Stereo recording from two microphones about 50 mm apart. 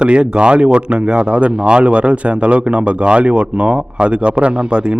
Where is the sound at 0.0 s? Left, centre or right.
Right.